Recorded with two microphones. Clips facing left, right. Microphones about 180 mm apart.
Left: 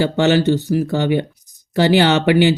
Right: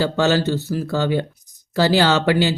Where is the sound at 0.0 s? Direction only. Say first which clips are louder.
Left 3 dB; 20° left (ahead or behind).